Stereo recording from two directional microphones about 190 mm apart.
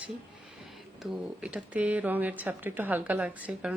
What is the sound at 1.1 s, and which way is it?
Speech, 5° right (ahead or behind).